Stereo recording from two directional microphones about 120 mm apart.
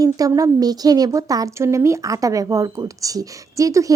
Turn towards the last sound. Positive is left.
turn(degrees=-25)  # may be behind; listen again after turning